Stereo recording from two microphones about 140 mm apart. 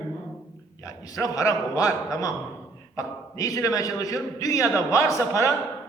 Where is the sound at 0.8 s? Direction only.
25° left (ahead or behind).